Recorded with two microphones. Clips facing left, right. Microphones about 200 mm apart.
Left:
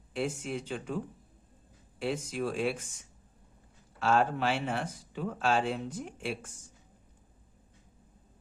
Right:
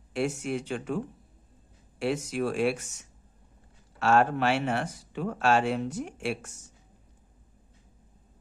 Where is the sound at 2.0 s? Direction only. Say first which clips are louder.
Right 4 dB; 70° right (ahead or behind).